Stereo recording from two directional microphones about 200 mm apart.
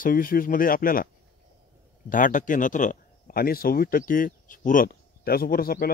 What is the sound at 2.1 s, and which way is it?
A man's voice, 40° left (ahead or behind).